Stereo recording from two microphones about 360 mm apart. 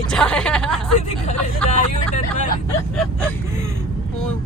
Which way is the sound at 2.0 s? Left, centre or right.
Left.